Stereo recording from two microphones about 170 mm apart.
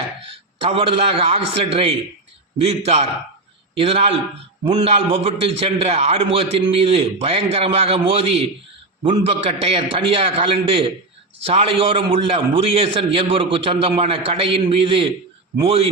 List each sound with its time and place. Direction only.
0.3 s a man's voice: 35° right (ahead or behind)